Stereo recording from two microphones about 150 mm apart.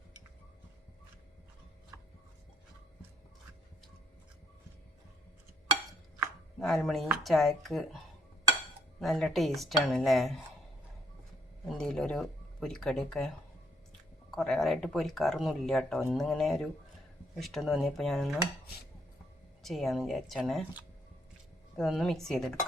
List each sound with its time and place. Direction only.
1.9 s a sound: 20° right (ahead or behind)
6.8 s speech: centre (ahead or behind)
9.0 s speech: centre (ahead or behind)
11.6 s speech: 5° left (ahead or behind)
19.6 s speech: centre (ahead or behind)
21.8 s speech: centre (ahead or behind)